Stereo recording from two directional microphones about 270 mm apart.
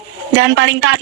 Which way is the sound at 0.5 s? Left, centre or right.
Right.